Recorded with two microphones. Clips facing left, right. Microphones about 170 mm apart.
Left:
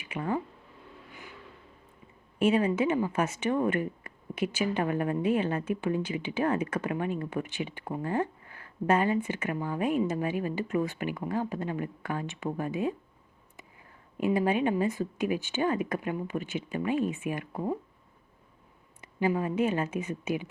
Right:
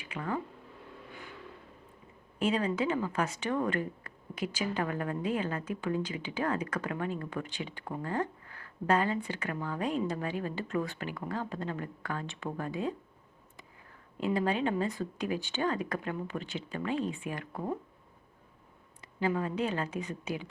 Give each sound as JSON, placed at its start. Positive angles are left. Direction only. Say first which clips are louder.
{"t": 0.0, "sound": "speech", "louder": "left 4 dB", "side_deg": 25}
{"t": 2.6, "sound": "a woman's voice", "louder": "left 4 dB", "side_deg": 20}
{"t": 14.2, "sound": "speech", "louder": "left 4 dB", "side_deg": 15}
{"t": 19.0, "sound": "a woman's voice", "louder": "left 3 dB", "side_deg": 15}